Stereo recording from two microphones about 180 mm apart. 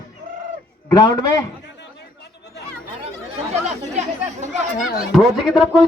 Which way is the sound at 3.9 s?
40° right (ahead or behind).